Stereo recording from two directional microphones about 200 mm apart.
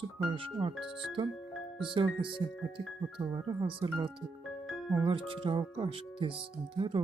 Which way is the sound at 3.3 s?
20° right (ahead or behind).